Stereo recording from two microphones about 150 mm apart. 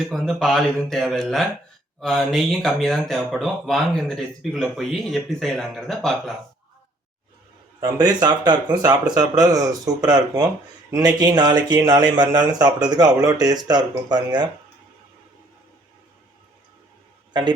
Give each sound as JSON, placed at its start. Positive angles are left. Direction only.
{"t": 0.1, "sound": "speech", "side_deg": 0}
{"t": 7.8, "sound": "speech", "side_deg": -25}